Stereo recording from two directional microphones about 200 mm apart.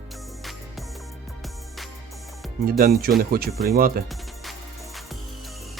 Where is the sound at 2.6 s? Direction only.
45° right (ahead or behind).